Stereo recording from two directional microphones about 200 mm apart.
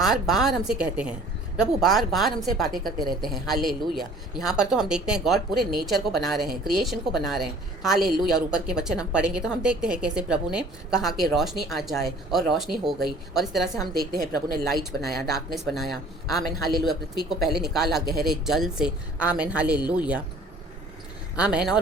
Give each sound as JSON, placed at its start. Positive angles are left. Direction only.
{"t": 0.0, "sound": "a woman's voice", "side_deg": 0}
{"t": 14.0, "sound": "a woman's voice", "side_deg": -50}
{"t": 15.4, "sound": "a woman's voice", "side_deg": 0}
{"t": 21.3, "sound": "a woman's voice", "side_deg": -5}